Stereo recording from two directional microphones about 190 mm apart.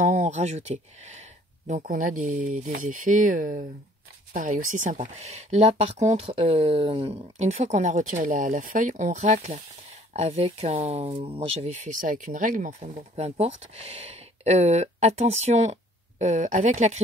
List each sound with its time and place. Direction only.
0.0 s speech: 40° right (ahead or behind)
11.7 s speech: 40° right (ahead or behind)